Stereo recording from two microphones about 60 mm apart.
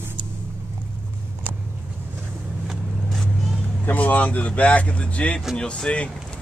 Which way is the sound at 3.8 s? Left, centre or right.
Left.